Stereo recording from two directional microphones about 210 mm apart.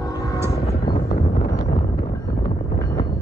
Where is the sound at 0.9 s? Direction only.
45° left (ahead or behind).